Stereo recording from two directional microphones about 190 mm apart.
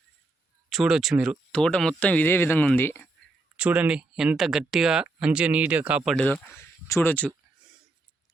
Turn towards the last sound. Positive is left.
turn(degrees=10)  # may be behind; listen again after turning